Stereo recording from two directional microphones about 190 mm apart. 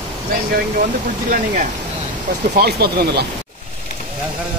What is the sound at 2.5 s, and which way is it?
Speech, 55° right (ahead or behind).